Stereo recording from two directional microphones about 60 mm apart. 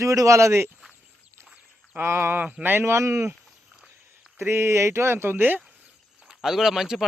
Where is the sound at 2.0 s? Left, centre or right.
Right.